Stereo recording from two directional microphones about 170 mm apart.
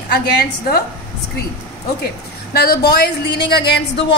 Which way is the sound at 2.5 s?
70° left (ahead or behind).